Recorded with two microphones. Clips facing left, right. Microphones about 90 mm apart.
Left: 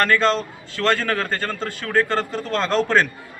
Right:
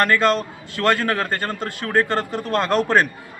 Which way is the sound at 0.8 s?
20° right (ahead or behind).